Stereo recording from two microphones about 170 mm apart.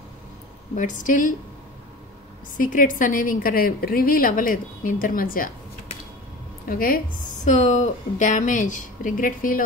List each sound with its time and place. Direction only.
0.7 s a woman's voice: 50° left (ahead or behind)
2.5 s a woman's voice: 55° left (ahead or behind)
6.7 s a woman's voice: 55° left (ahead or behind)
7.4 s a woman's voice: 45° left (ahead or behind)